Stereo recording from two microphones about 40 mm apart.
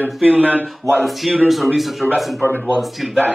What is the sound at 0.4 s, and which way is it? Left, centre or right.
Speech, left.